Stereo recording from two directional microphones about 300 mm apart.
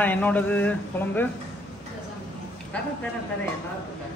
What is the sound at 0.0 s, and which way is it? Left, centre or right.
Speech, centre.